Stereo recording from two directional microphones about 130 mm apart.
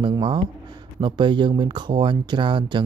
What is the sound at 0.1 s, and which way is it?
Speech, 35° right (ahead or behind).